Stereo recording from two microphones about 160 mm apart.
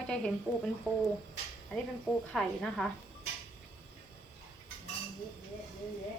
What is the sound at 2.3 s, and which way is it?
Speech, 5° left (ahead or behind).